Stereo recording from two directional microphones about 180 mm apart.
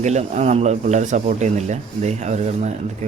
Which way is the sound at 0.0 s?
40° right (ahead or behind).